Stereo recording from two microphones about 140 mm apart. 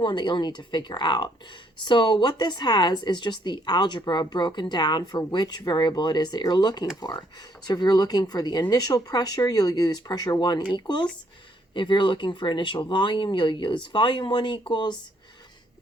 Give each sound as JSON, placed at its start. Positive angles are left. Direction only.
{"t": 0.0, "sound": "speech", "side_deg": 35}